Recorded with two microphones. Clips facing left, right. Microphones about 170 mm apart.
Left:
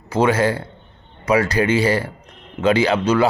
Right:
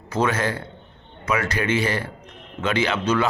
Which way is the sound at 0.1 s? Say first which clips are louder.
Left 6 dB; 30° left (ahead or behind).